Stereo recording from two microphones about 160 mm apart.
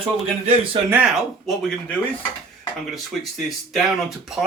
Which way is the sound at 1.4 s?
5° left (ahead or behind).